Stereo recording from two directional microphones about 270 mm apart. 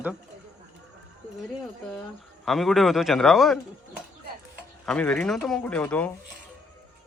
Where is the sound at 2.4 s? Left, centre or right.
Centre.